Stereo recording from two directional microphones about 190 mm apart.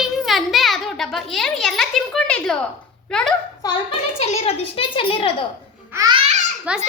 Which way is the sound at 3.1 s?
5° left (ahead or behind).